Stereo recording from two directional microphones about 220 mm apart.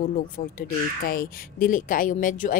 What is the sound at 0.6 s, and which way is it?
Speech, 40° left (ahead or behind).